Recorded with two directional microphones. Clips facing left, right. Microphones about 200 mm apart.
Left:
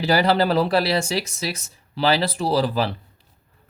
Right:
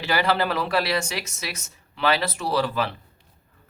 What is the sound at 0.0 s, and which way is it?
A man's voice, 35° left (ahead or behind).